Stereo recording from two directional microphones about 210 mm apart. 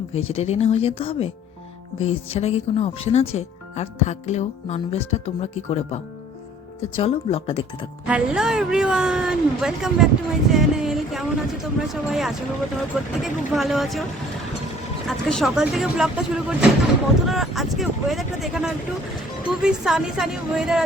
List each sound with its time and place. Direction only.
0.1 s speech: 30° left (ahead or behind)
8.0 s speech: 5° right (ahead or behind)
15.0 s speech: centre (ahead or behind)